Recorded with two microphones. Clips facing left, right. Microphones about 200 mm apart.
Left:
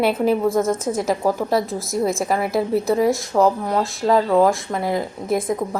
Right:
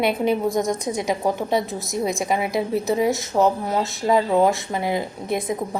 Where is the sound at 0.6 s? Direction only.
15° right (ahead or behind).